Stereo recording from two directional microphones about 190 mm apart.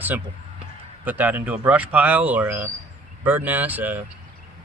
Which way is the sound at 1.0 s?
10° right (ahead or behind).